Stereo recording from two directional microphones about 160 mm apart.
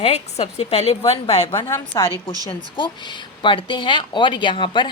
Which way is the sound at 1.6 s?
15° left (ahead or behind).